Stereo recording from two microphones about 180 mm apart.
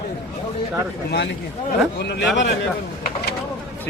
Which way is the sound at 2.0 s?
65° left (ahead or behind).